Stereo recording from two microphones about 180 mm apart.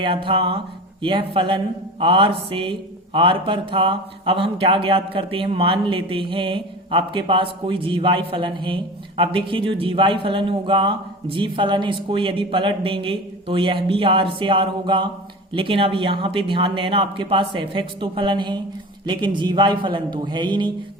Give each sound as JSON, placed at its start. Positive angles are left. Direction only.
{"t": 0.0, "sound": "speech", "side_deg": -30}